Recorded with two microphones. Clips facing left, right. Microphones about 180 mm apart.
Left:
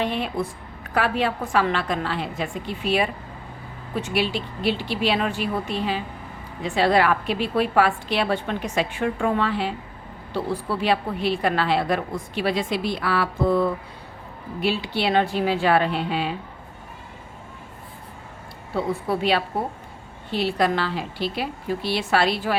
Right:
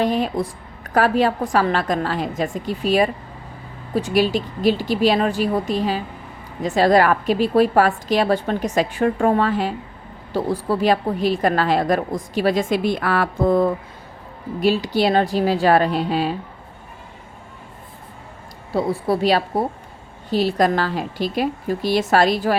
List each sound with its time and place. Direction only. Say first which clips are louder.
0.0 s a woman's voice: right 5 dB; 40° right (ahead or behind)
18.7 s a woman's voice: right 4 dB; 35° right (ahead or behind)